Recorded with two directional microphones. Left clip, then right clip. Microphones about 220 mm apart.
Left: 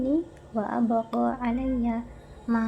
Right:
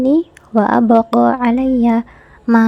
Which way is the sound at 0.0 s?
45° right (ahead or behind).